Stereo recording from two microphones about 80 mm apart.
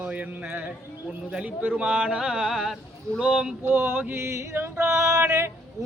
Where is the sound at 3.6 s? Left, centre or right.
Right.